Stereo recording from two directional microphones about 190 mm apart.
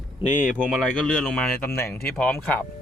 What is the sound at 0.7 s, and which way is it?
Speech, 5° left (ahead or behind).